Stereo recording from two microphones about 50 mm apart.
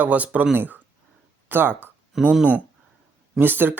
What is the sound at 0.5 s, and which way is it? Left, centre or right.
Speech, right.